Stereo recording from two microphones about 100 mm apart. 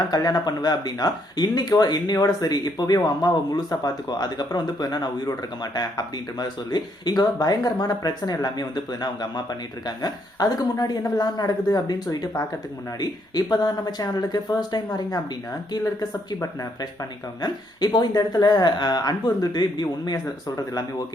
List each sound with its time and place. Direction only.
0.1 s speech: 40° left (ahead or behind)